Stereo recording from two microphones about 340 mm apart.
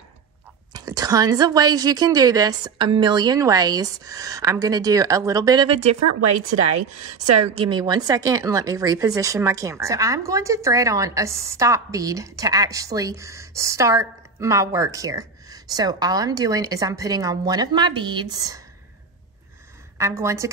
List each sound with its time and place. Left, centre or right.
0.7 s speech: centre
6.5 s a woman's voice: right
7.5 s speech: centre
20.0 s speech: centre